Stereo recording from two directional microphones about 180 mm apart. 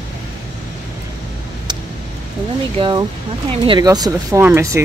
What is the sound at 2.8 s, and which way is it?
Speech, 25° right (ahead or behind).